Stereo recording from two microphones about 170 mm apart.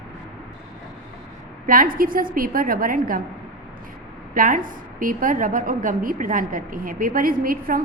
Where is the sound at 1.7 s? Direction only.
55° right (ahead or behind).